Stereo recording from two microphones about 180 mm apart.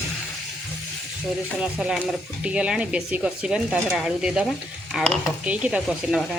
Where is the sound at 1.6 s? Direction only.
5° right (ahead or behind).